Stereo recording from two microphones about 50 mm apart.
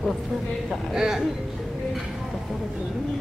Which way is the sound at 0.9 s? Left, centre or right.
Centre.